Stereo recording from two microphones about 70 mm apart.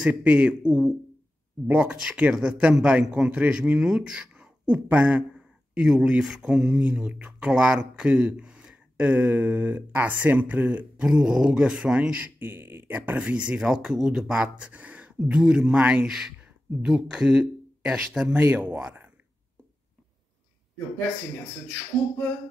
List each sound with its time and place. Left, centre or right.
0.1 s speech: centre
4.7 s speech: right
12.4 s speech: right; by 15.8 s centre
15.8 s speech: right
16.8 s speech: centre